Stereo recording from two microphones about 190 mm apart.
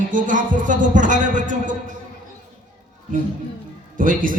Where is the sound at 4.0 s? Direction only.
45° right (ahead or behind).